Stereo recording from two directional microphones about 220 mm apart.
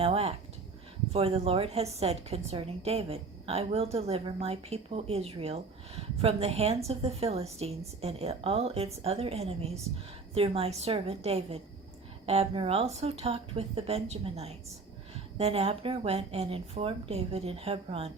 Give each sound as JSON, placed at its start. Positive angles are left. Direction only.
{"t": 0.0, "sound": "a woman's voice", "side_deg": -25}